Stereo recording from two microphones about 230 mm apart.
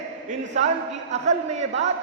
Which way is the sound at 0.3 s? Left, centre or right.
Right.